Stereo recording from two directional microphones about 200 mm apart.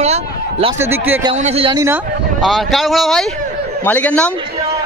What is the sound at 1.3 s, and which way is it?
Speech, 35° right (ahead or behind).